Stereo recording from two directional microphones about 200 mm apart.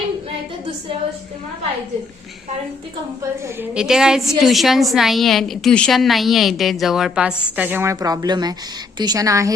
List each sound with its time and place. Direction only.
3.4 s a woman's voice: 5° right (ahead or behind)